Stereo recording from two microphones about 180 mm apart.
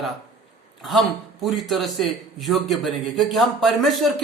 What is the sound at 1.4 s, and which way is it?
A man's voice, centre (ahead or behind).